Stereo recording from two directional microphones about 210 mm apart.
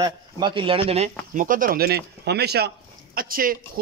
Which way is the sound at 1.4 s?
40° right (ahead or behind).